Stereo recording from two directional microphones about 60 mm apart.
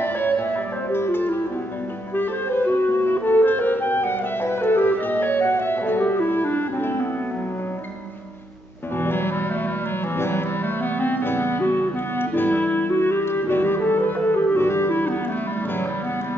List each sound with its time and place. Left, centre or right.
0.0 s music: left
2.1 s clarinet: left
9.0 s music: left